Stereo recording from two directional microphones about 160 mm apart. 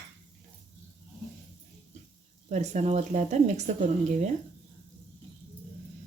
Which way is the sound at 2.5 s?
45° right (ahead or behind).